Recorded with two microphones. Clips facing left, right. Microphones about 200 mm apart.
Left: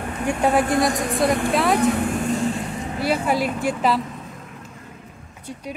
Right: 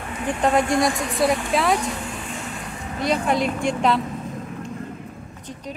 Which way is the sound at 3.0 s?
5° left (ahead or behind).